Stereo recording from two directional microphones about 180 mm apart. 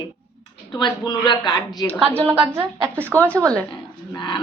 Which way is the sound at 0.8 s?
25° left (ahead or behind).